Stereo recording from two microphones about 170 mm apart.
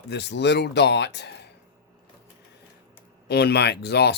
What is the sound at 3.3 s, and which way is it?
Speech, 70° left (ahead or behind).